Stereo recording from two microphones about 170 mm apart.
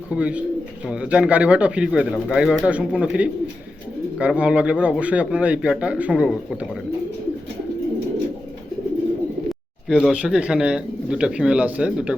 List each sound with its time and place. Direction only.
0.1 s a man's voice: 5° right (ahead or behind)
9.5 s speech: 5° right (ahead or behind)